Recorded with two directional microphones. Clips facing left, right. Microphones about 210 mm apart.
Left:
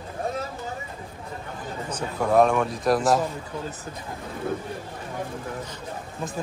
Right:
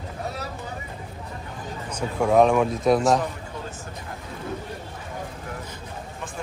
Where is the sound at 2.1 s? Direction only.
Centre (ahead or behind).